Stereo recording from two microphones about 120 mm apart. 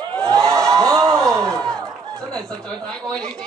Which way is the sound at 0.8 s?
25° right (ahead or behind).